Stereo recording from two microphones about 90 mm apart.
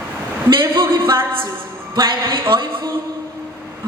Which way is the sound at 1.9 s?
50° right (ahead or behind).